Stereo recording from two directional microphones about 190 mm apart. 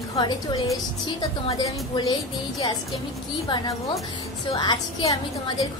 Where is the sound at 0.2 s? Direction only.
25° left (ahead or behind).